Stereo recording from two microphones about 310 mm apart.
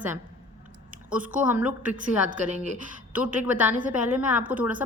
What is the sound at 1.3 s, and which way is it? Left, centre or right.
Speech, centre.